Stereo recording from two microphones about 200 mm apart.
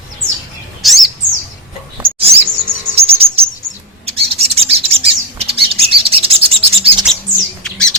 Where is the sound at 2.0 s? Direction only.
25° right (ahead or behind).